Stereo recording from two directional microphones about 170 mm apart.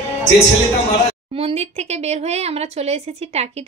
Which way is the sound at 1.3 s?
35° right (ahead or behind).